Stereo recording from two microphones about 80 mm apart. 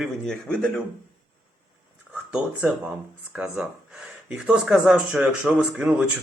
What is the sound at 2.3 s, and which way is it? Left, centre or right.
Speech, centre.